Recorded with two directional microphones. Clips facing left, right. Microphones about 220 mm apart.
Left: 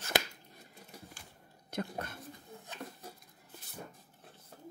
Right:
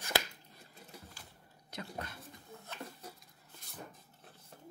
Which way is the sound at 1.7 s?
50° left (ahead or behind).